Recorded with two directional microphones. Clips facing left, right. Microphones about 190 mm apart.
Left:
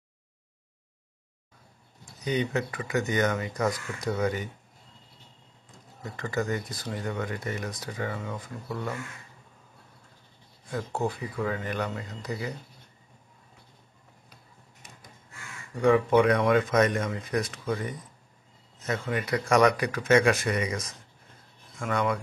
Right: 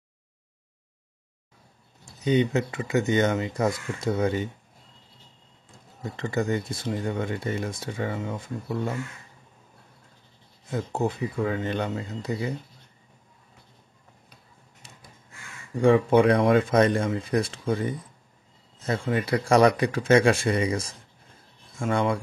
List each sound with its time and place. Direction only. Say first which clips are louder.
2.0 s speech: right 6 dB; 25° right (ahead or behind)
6.0 s speech: right 3 dB; 25° right (ahead or behind)
10.6 s speech: right 3 dB; 25° right (ahead or behind)
14.8 s a sound: even; 30° right (ahead or behind)
15.8 s speech: right 2 dB; 30° right (ahead or behind)